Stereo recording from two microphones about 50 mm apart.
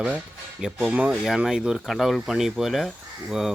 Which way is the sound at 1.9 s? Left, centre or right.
Centre.